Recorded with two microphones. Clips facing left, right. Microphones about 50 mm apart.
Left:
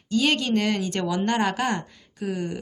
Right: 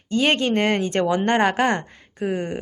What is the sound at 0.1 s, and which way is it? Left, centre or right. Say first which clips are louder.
Speech: right 3 dB; right.